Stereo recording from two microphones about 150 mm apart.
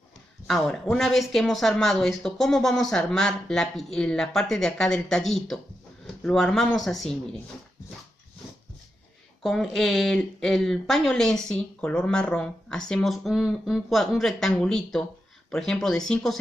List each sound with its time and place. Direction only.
0.5 s speech: 5° left (ahead or behind)
9.4 s speech: centre (ahead or behind)